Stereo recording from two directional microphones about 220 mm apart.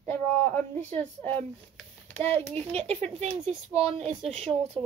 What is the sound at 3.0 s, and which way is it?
Speech, 30° right (ahead or behind).